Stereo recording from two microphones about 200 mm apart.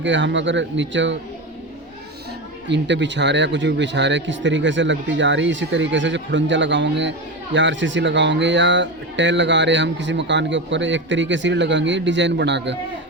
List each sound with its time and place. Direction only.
0.0 s speech: 65° right (ahead or behind)
2.6 s speech: 60° right (ahead or behind)